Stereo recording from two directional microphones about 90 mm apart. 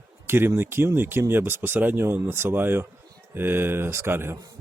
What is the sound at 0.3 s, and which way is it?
Speech, 25° right (ahead or behind).